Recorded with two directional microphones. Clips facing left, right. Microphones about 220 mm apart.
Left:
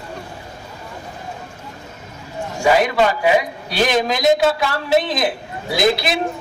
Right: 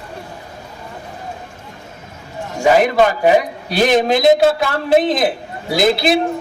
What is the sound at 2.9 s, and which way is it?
Speech, 45° right (ahead or behind).